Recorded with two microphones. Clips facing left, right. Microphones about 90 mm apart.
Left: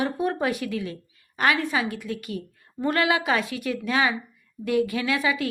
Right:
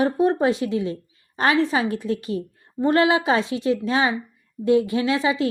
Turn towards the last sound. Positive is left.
turn(degrees=-25)  # may be behind; listen again after turning